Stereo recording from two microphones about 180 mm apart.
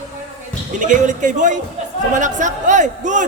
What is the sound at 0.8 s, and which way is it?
A man's voice, 45° right (ahead or behind).